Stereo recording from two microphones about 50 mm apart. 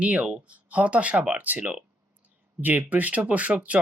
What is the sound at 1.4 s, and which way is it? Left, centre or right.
Speech, right.